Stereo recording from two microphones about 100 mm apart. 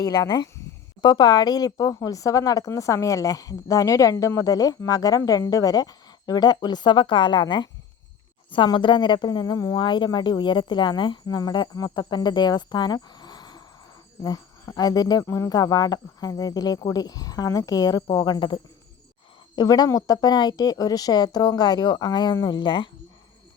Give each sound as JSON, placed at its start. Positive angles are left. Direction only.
{"t": 0.0, "sound": "speech", "side_deg": 40}
{"t": 14.8, "sound": "speech", "side_deg": 40}